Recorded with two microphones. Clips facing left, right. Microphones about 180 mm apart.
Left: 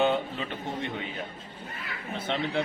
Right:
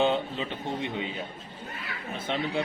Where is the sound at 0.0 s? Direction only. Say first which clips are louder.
Even; 20° right (ahead or behind).